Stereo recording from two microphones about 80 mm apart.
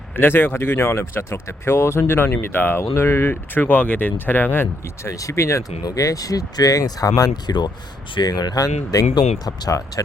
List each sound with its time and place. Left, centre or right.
0.2 s speech: left
5.0 s speech: left